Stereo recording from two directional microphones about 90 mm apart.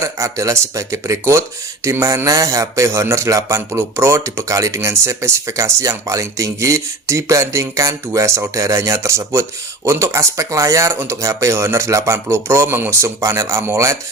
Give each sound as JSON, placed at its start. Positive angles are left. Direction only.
{"t": 0.0, "sound": "speech", "side_deg": -35}